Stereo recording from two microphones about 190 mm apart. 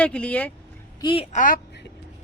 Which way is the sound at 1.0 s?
25° left (ahead or behind).